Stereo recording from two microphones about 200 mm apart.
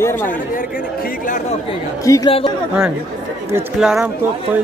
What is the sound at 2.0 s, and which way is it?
Speech, 15° left (ahead or behind).